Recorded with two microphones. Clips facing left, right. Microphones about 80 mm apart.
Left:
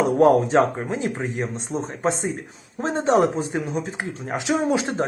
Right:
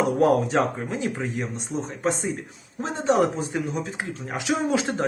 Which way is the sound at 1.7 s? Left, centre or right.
Left.